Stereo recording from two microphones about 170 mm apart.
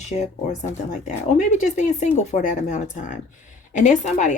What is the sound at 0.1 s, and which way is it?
Speech, 45° left (ahead or behind).